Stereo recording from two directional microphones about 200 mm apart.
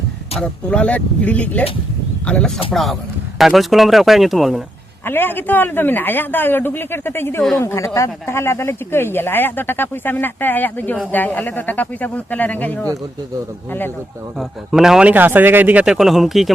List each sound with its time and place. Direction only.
0.3 s a man's voice: 5° left (ahead or behind)
5.0 s speech: 10° left (ahead or behind)
14.3 s a man's voice: centre (ahead or behind)